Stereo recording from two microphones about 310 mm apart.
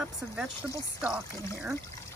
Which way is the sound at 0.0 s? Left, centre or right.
Centre.